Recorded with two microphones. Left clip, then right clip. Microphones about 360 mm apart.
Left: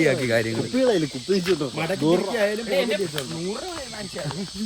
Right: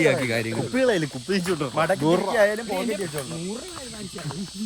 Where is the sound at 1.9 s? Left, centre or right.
Right.